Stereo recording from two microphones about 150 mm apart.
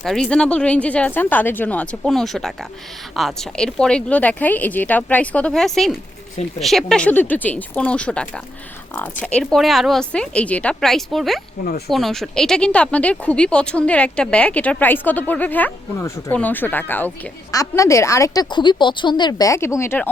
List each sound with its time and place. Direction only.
0.0 s a woman's voice: centre (ahead or behind)